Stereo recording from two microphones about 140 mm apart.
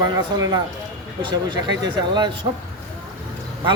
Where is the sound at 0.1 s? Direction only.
25° right (ahead or behind).